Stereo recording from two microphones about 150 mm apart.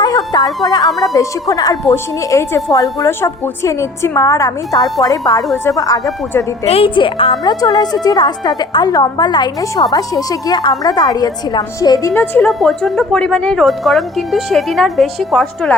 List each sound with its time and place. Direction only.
0.0 s music: 25° left (ahead or behind)
0.9 s speech: centre (ahead or behind)
1.1 s a woman's voice: 25° left (ahead or behind)
6.7 s a woman's voice: 40° left (ahead or behind); by 12.5 s 10° left (ahead or behind)
12.5 s speech: centre (ahead or behind)